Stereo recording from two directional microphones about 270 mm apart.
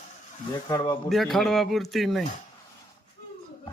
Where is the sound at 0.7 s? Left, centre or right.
Centre.